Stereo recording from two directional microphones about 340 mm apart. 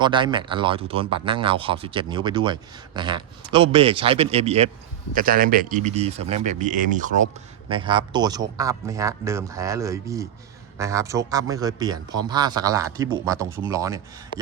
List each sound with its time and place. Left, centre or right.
0.0 s speech: centre